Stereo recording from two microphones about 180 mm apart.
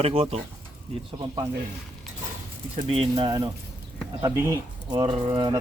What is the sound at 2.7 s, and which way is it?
Speech, 30° right (ahead or behind).